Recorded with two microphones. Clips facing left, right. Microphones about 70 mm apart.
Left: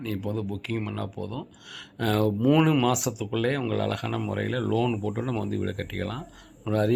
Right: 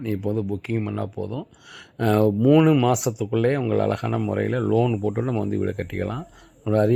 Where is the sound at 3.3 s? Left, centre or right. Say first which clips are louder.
Right 6 dB; right.